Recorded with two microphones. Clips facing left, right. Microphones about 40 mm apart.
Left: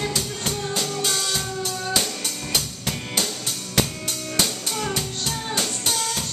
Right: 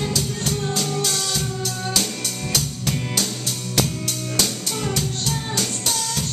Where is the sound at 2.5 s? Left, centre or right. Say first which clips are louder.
Right 3 dB; centre.